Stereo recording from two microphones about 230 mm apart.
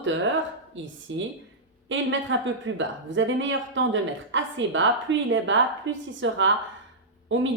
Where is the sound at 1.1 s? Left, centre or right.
Right.